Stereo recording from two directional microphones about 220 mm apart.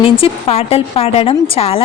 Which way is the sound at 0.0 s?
25° left (ahead or behind).